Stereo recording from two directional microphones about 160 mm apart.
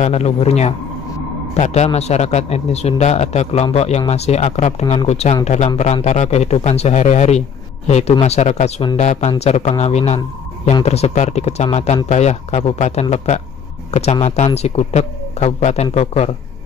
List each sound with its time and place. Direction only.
0.0 s a man's voice: 40° left (ahead or behind)